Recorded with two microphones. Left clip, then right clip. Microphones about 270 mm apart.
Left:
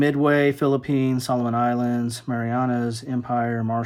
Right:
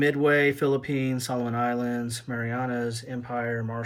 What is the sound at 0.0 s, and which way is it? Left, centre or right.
Speech, centre.